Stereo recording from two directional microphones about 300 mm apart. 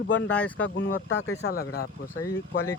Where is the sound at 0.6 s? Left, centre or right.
Left.